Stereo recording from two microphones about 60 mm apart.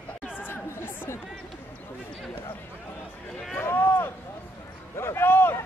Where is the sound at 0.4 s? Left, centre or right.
Left.